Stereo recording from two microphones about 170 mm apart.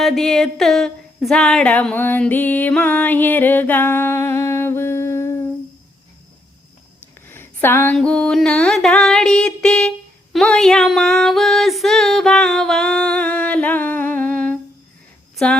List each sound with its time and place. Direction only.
0.0 s speech: centre (ahead or behind)
7.3 s a sound: 15° left (ahead or behind)
10.3 s female singing: 5° left (ahead or behind)